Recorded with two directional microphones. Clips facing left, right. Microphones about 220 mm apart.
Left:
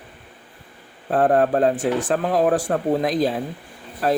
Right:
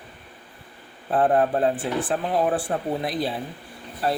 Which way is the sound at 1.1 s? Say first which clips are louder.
Left 3 dB; 45° left (ahead or behind).